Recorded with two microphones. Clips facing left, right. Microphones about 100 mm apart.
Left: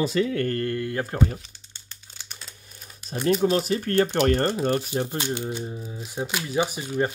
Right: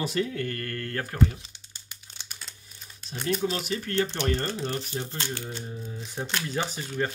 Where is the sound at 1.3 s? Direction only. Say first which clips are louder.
Left 5 dB; 20° right (ahead or behind).